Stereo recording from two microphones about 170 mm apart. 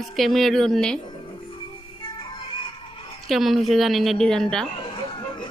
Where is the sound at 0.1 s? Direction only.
Centre (ahead or behind).